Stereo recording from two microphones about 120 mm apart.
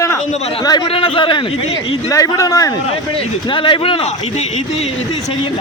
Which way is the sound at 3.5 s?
45° left (ahead or behind).